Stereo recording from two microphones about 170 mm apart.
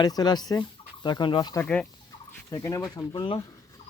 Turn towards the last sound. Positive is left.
turn(degrees=30)  # may be behind; listen again after turning